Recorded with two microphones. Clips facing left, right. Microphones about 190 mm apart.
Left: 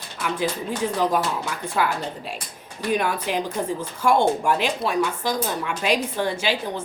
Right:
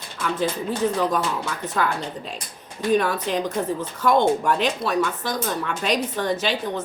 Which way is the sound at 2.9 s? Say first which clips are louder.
Right 2 dB; 10° left (ahead or behind).